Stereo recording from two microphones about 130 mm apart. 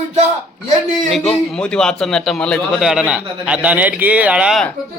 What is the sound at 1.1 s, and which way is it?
A man's voice, centre (ahead or behind).